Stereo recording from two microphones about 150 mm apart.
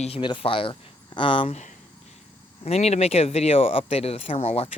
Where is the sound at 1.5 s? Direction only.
50° left (ahead or behind).